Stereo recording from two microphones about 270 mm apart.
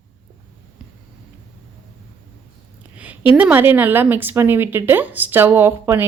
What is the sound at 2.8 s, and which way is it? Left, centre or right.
Speech, centre.